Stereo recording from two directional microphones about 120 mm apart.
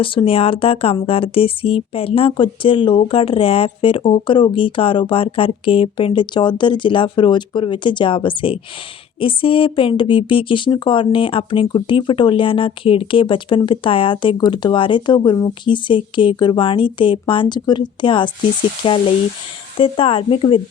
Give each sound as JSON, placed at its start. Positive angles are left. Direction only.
{"t": 0.0, "sound": "speech", "side_deg": 45}